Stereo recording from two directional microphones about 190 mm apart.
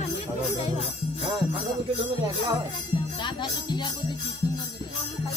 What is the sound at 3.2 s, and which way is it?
Jingle bell, 25° left (ahead or behind).